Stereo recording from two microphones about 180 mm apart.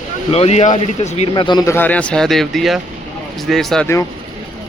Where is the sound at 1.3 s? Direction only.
25° left (ahead or behind).